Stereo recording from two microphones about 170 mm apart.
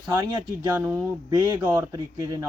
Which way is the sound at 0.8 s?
20° right (ahead or behind).